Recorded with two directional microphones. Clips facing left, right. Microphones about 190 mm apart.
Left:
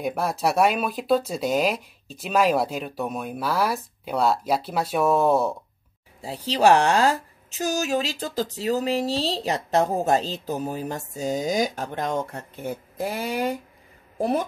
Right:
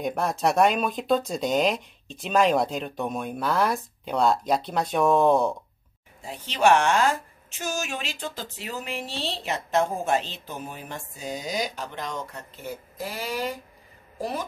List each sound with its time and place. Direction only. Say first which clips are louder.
0.0 s speech: even; 5° left (ahead or behind)
6.2 s speech: left 3 dB; 35° left (ahead or behind); by 13.6 s 55° left (ahead or behind)